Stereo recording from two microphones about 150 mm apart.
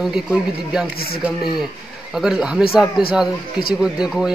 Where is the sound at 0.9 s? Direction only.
90° left.